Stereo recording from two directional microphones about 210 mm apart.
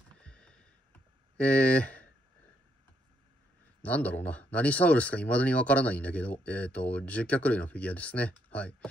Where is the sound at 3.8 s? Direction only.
5° left (ahead or behind).